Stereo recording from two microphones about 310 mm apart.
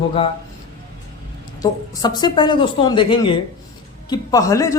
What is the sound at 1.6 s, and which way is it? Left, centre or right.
A woman's voice, centre.